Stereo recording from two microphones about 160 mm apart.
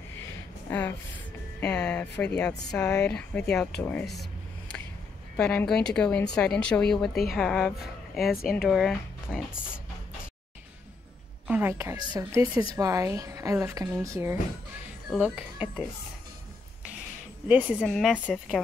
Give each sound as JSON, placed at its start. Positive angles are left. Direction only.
{"t": 0.7, "sound": "a woman's voice", "side_deg": 15}
{"t": 4.0, "sound": "a sound", "side_deg": 0}
{"t": 5.3, "sound": "speech", "side_deg": 10}
{"t": 11.4, "sound": "a woman's voice", "side_deg": -10}
{"t": 17.5, "sound": "speech", "side_deg": -10}
{"t": 17.8, "sound": "speech", "side_deg": 0}